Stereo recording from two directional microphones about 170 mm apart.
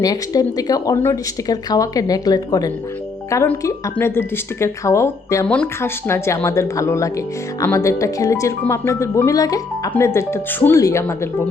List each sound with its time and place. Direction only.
0.0 s speech: 20° left (ahead or behind)